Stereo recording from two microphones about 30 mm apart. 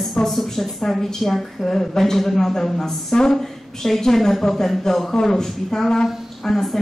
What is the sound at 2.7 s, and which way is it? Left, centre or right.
Speech, centre.